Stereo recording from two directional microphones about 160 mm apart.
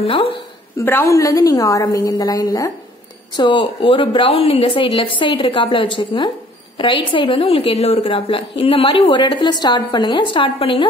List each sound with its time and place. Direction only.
0.0 s a woman's voice: 35° left (ahead or behind)
0.7 s a woman's voice: 15° left (ahead or behind); by 10.9 s 35° left (ahead or behind)